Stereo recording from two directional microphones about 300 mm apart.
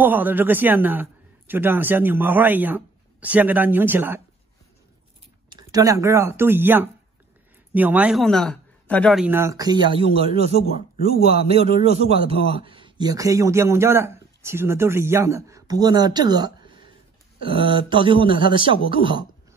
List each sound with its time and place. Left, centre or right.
0.0 s a man's voice: centre
5.5 s a man's voice: centre